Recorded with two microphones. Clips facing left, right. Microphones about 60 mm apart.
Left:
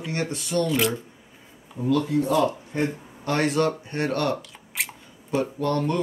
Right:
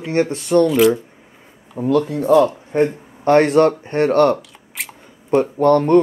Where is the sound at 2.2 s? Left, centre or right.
Right.